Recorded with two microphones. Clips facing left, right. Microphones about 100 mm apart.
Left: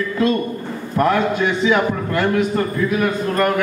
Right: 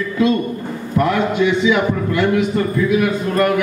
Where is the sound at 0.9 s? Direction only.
40° left (ahead or behind).